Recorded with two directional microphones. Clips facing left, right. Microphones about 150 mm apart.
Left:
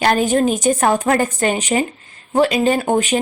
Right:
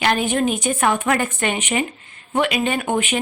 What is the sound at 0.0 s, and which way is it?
Speech, 40° left (ahead or behind).